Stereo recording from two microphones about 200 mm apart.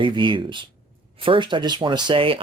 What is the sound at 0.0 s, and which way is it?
Speech, 25° right (ahead or behind).